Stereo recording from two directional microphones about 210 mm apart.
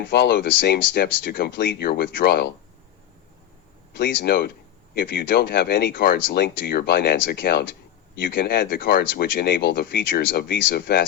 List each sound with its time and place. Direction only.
0.0 s speech: 50° left (ahead or behind)
3.9 s speech: 50° left (ahead or behind)